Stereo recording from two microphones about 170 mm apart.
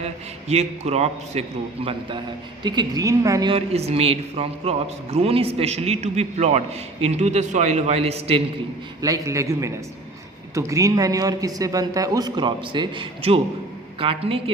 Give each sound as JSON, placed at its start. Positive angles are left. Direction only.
{"t": 0.0, "sound": "a man's voice", "side_deg": -40}
{"t": 3.5, "sound": "a man's voice", "side_deg": -35}
{"t": 9.0, "sound": "a man's voice", "side_deg": -20}